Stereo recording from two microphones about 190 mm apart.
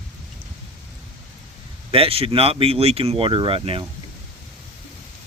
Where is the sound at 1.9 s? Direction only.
30° right (ahead or behind).